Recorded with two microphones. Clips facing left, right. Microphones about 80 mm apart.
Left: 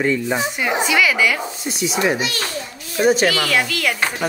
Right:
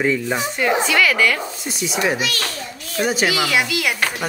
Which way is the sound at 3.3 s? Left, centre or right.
Centre.